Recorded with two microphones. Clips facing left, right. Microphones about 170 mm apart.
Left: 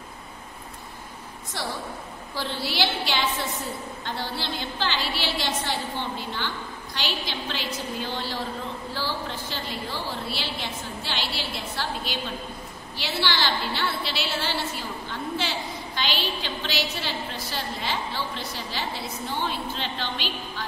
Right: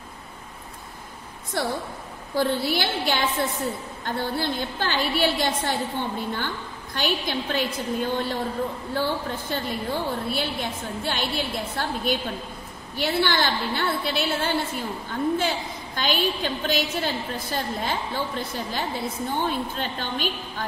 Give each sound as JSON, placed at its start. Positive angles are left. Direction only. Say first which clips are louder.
{"t": 2.3, "sound": "a woman's voice", "louder": "right 6 dB", "side_deg": -50}